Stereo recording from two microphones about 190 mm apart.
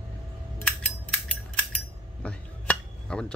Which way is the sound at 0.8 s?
5° left (ahead or behind).